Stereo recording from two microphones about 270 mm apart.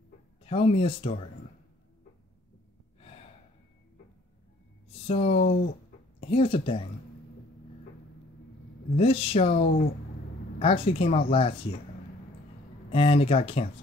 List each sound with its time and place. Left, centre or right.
0.4 s speech: left
4.8 s speech: left
8.9 s speech: left
12.9 s speech: left